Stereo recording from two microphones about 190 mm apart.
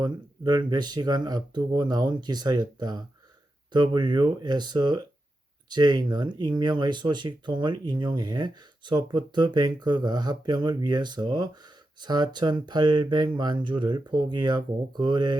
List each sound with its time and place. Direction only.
0.0 s speech: 20° right (ahead or behind)